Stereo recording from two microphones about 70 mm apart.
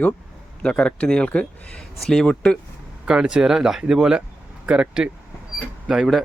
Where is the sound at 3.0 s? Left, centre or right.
Centre.